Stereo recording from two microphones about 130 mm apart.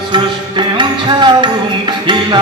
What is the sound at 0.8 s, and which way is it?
Music, 35° right (ahead or behind).